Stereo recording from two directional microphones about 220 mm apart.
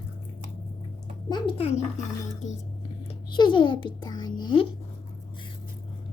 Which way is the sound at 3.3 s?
20° left (ahead or behind).